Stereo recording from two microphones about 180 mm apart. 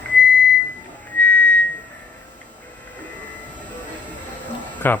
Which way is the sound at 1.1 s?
10° left (ahead or behind).